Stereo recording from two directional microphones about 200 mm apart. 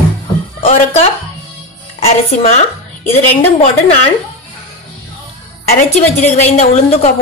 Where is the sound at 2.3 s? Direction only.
30° left (ahead or behind).